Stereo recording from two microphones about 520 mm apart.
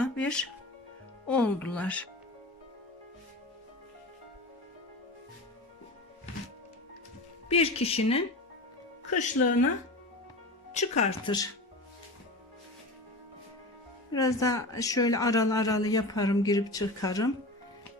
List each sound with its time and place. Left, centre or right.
0.0 s music: centre
1.3 s speech: centre
7.4 s a woman's voice: centre
9.4 s speech: left
10.8 s a woman's voice: centre
14.1 s a woman's voice: centre